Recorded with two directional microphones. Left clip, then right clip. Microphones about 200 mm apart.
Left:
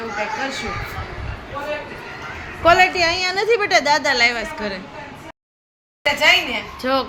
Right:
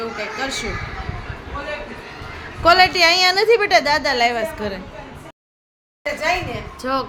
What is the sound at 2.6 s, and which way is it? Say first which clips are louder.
A woman's voice: right 1 dB; 10° right (ahead or behind).